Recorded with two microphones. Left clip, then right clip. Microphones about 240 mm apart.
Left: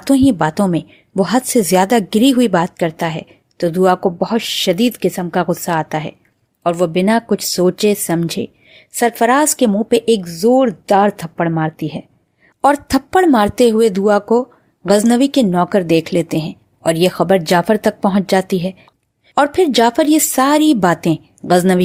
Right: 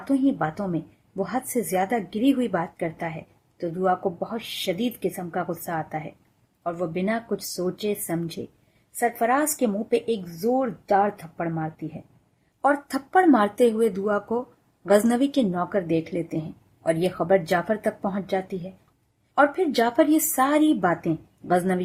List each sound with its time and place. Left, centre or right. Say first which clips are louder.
0.0 s a woman's voice: left 11 dB; left